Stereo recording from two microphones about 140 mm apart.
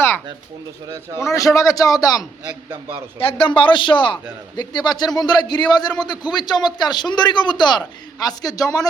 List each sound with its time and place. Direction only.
1.2 s a man's voice: 20° left (ahead or behind)
3.2 s a man's voice: 40° left (ahead or behind)